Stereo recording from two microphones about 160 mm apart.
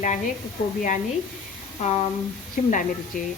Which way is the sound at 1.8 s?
40° left (ahead or behind).